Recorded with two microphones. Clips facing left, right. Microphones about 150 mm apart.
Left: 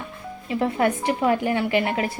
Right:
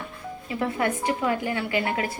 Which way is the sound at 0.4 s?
25° left (ahead or behind).